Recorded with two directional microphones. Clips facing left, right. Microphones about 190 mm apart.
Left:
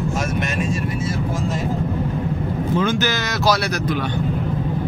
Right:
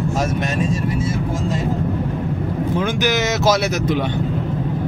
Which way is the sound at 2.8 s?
15° right (ahead or behind).